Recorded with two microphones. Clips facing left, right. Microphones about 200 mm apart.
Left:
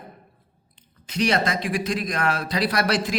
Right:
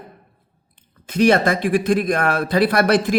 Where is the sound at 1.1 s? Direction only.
50° right (ahead or behind).